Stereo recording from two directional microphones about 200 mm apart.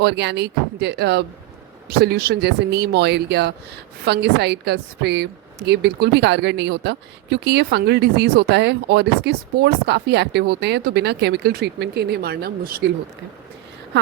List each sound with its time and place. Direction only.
0.0 s a woman's voice: 60° right (ahead or behind)
13.9 s a woman's voice: 65° right (ahead or behind)